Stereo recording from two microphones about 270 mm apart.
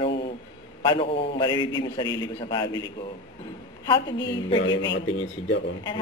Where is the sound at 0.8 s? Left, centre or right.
Centre.